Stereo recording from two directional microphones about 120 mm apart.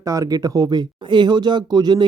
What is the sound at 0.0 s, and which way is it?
Speech, 30° right (ahead or behind).